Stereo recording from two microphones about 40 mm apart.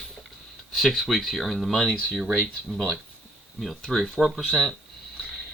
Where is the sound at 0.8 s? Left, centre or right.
Centre.